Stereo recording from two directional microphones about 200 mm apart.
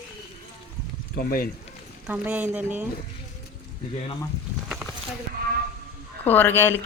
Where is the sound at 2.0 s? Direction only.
5° right (ahead or behind).